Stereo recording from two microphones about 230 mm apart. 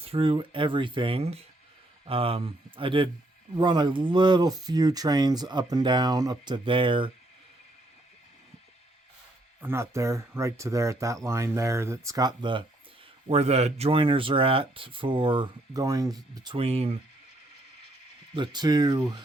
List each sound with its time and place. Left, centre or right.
0.0 s speech: right
9.6 s speech: centre; by 17.0 s right
18.3 s speech: centre